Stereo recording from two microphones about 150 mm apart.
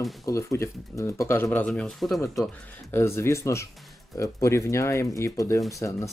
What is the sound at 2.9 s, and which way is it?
Speech, 15° left (ahead or behind).